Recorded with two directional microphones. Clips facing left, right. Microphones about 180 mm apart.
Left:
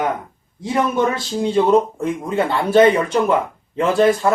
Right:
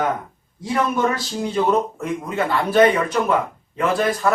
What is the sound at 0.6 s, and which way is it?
A man's voice, 25° left (ahead or behind).